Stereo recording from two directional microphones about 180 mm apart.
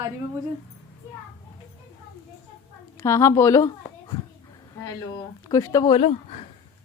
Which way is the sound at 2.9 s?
15° left (ahead or behind).